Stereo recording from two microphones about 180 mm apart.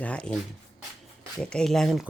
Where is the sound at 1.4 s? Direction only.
5° left (ahead or behind).